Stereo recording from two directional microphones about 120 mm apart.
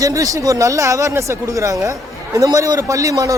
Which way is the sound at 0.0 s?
25° right (ahead or behind).